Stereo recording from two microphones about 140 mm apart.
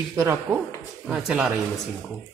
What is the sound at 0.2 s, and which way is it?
Speech, 20° right (ahead or behind).